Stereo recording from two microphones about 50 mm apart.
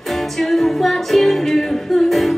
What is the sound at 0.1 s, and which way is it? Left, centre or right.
Music, centre.